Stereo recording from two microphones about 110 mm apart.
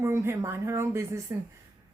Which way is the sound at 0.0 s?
25° right (ahead or behind).